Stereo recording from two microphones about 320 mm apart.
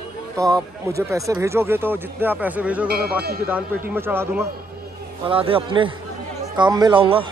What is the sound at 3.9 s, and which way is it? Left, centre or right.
Speech, centre.